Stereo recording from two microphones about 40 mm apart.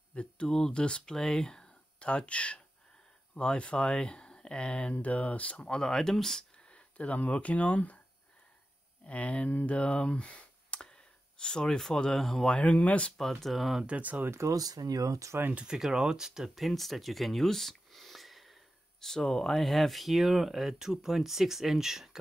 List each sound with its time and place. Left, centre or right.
0.1 s speech: left
2.0 s speech: left
4.9 s speech: left
5.8 s speech: centre
6.7 s speech: left
9.0 s speech: left; by 12.4 s centre
12.5 s speech: left
13.2 s speech: centre
13.8 s speech: right
15.5 s speech: right
16.5 s speech: centre
18.9 s speech: centre